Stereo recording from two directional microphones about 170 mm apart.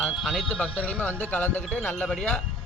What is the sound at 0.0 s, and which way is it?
A man's voice, centre (ahead or behind).